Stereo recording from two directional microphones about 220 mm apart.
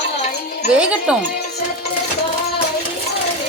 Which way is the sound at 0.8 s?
5° right (ahead or behind).